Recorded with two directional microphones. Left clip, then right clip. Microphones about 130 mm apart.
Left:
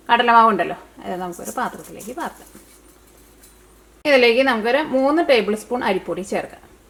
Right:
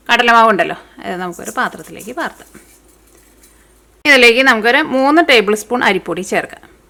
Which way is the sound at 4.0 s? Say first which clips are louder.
Right 6 dB; 40° right (ahead or behind).